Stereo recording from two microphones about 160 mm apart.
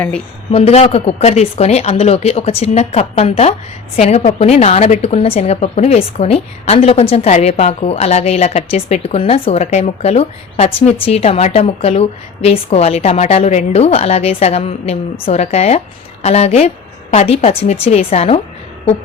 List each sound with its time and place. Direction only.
0.5 s a woman's voice: 40° left (ahead or behind)